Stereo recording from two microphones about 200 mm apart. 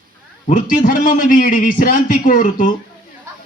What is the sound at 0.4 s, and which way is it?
A man's voice, 40° left (ahead or behind).